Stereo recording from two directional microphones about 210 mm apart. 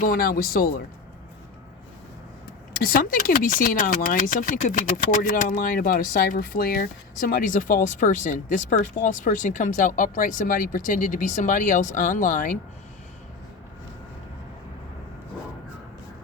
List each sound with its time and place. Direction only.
0.0 s speech: 45° left (ahead or behind)
2.8 s speech: 45° left (ahead or behind)